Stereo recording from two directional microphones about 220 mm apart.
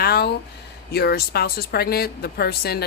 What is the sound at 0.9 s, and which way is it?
Speech, 45° left (ahead or behind).